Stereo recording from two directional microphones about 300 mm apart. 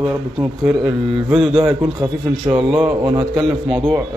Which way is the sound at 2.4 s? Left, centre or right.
Centre.